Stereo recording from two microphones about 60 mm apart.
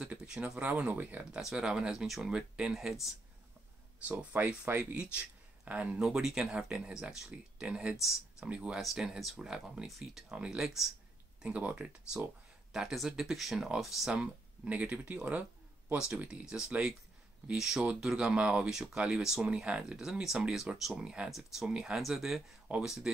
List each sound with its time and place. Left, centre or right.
0.0 s a sound: centre
0.6 s speech: right
1.4 s speech: centre
4.0 s speech: right
4.7 s speech: right
5.7 s speech: right
6.0 s speech: centre
8.5 s speech: centre
11.4 s speech: centre
12.7 s speech: centre
14.1 s speech: right
16.3 s speech: centre
17.6 s speech: centre
20.9 s speech: centre